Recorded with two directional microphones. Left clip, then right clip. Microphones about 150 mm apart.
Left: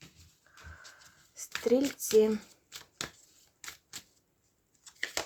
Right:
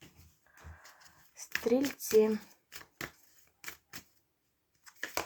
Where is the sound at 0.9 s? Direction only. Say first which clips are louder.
Left 3 dB; 20° left (ahead or behind).